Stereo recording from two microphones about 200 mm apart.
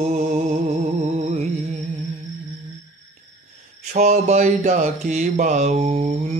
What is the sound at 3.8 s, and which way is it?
Mantra, 35° right (ahead or behind).